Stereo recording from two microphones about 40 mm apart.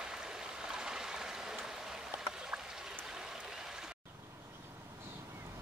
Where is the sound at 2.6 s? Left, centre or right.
Centre.